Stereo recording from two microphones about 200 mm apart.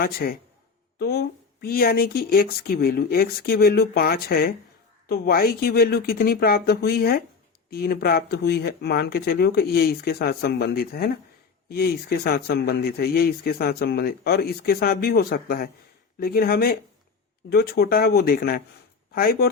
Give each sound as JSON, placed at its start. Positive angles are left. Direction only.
{"t": 0.0, "sound": "speech", "side_deg": 50}